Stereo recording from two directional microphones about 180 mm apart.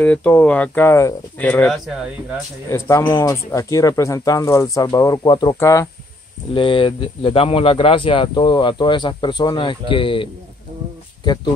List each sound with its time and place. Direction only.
0.0 s speech: 10° left (ahead or behind)
2.7 s speech: 15° left (ahead or behind)